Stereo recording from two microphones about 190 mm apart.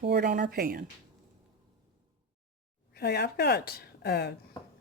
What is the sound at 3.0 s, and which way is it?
A woman's voice, 60° left (ahead or behind).